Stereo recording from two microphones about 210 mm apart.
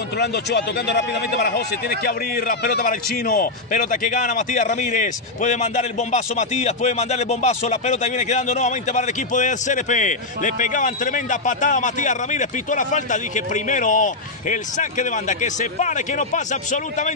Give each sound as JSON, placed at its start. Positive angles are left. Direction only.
{"t": 0.2, "sound": "a man's voice", "side_deg": 55}